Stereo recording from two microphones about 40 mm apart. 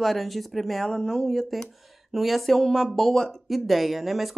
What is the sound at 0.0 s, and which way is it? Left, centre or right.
Speech, centre.